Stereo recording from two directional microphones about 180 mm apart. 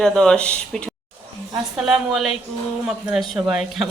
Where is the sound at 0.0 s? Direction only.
5° left (ahead or behind).